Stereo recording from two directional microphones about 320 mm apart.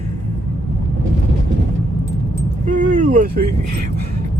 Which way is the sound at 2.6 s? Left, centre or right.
Right.